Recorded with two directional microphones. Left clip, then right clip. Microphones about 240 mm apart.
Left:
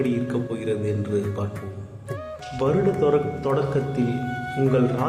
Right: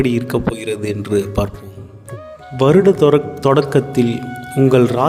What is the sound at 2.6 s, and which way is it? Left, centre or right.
Speech, right.